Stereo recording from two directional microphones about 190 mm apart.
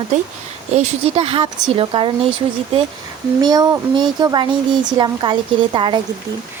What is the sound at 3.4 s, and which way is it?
Speech, 20° right (ahead or behind).